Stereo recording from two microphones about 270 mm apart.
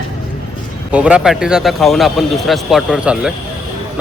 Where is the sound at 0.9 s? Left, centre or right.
Centre.